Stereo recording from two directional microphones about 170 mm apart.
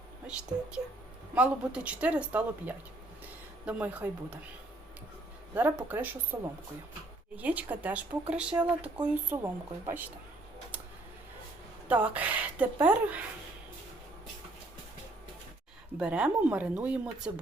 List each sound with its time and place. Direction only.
1.4 s speech: 5° right (ahead or behind)
5.5 s speech: 10° right (ahead or behind)
11.9 s speech: 10° right (ahead or behind)
16.0 s speech: 5° right (ahead or behind)